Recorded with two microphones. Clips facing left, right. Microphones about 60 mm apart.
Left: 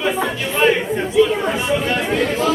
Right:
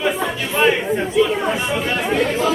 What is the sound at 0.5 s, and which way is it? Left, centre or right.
Speech, centre.